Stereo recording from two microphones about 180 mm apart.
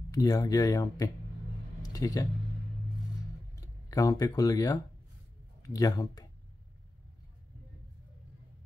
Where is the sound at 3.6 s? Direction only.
20° left (ahead or behind).